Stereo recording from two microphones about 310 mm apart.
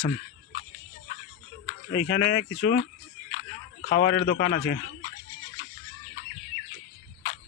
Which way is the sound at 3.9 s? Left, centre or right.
Left.